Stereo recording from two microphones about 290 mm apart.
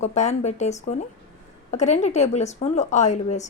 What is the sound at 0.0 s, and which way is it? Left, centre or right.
Speech, left.